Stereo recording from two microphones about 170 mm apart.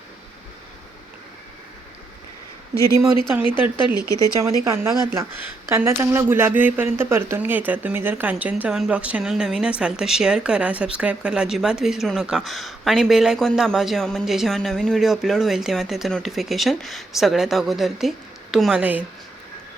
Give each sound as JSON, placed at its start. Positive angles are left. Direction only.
{"t": 3.8, "sound": "speech", "side_deg": 25}
{"t": 4.6, "sound": "speech", "side_deg": -15}